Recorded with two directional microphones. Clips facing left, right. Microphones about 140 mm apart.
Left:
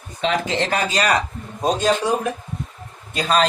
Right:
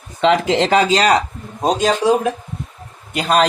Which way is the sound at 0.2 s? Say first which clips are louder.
Right 7 dB; 80° right.